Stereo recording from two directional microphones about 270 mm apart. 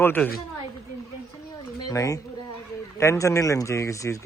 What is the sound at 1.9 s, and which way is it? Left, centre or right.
Speech, centre.